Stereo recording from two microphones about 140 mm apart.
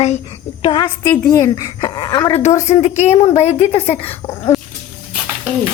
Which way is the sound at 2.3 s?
55° left (ahead or behind).